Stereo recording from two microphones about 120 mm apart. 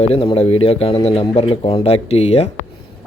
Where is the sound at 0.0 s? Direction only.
55° left (ahead or behind).